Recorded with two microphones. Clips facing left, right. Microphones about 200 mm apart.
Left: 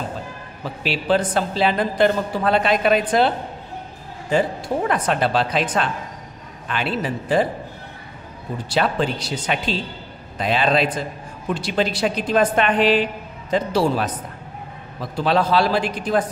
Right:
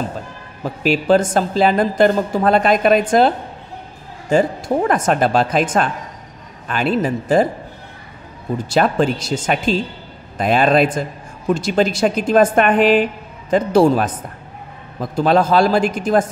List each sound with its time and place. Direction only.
0.8 s a woman's voice: 45° right (ahead or behind)
8.6 s a woman's voice: 45° right (ahead or behind)